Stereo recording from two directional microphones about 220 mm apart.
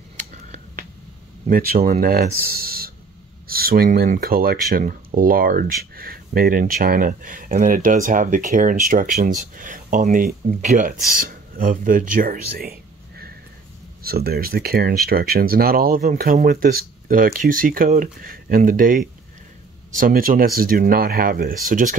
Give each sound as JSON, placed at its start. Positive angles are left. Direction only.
{"t": 0.2, "sound": "finger snapping", "side_deg": -35}
{"t": 1.5, "sound": "speech", "side_deg": -40}